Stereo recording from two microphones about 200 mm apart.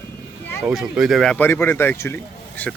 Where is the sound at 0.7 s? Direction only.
5° right (ahead or behind).